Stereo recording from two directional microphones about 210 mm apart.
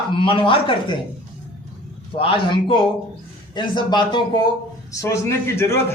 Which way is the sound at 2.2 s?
25° left (ahead or behind).